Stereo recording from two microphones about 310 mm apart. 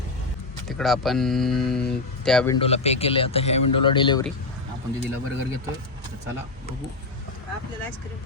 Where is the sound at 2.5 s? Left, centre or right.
Centre.